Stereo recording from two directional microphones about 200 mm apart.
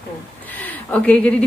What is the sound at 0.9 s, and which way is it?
Speech, 5° left (ahead or behind).